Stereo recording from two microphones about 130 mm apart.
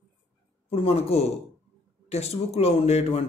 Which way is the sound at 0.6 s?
50° left (ahead or behind).